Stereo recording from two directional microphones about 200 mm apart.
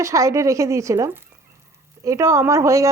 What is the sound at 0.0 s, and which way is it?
A woman's voice, 15° right (ahead or behind).